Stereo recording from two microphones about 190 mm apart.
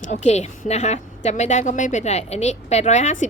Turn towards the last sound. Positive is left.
turn(degrees=40)  # may be behind; listen again after turning